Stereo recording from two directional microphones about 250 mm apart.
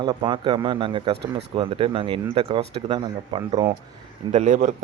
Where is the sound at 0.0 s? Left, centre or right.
Centre.